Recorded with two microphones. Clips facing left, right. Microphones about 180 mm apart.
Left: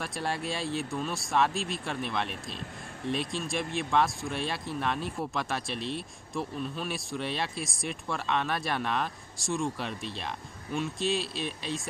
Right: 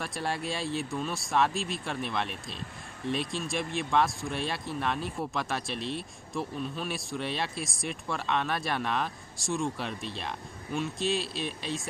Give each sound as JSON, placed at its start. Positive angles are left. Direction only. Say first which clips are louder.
{"t": 0.0, "sound": "speech", "louder": "even", "side_deg": 0}